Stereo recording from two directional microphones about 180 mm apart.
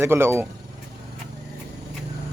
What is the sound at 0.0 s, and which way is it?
Speech, 15° right (ahead or behind).